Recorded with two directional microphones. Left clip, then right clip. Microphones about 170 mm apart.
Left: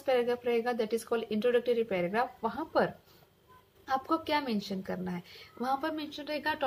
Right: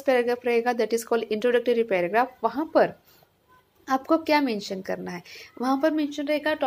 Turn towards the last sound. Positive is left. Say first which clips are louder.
# right 8 dB
turn(degrees=-10)  # may be behind; listen again after turning